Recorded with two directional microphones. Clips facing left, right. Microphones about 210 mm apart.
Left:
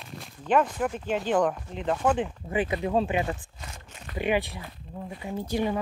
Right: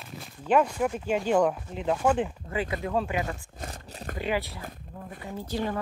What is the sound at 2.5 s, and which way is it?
Speech, 20° left (ahead or behind).